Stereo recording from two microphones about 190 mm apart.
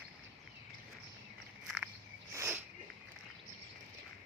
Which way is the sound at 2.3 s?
15° right (ahead or behind).